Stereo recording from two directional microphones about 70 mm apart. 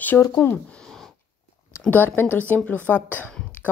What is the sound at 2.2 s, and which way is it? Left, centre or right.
Speech, left.